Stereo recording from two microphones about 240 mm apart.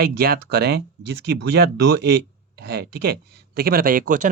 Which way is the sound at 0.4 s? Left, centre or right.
Right.